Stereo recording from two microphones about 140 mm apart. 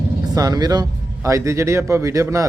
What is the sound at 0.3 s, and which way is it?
Speech, 25° right (ahead or behind).